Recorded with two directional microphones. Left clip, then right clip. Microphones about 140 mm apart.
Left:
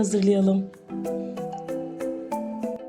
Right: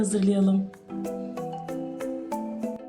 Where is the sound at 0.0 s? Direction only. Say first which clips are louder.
Left 4 dB; 35° left (ahead or behind).